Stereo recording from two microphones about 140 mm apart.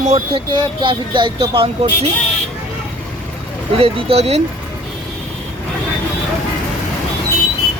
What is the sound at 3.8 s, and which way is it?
Speech, 45° right (ahead or behind).